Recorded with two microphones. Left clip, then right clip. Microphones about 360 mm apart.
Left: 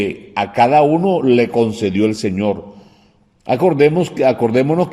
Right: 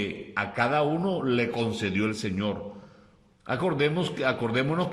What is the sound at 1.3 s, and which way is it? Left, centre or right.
Speech, centre.